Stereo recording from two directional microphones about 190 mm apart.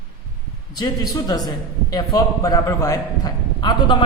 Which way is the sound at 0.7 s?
20° left (ahead or behind).